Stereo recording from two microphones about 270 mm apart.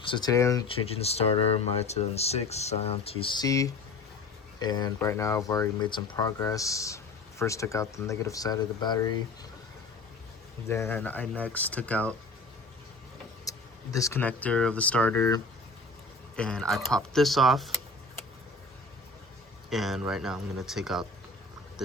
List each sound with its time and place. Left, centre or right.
0.0 s speech: centre
10.7 s speech: centre
13.4 s speech: centre
19.7 s speech: centre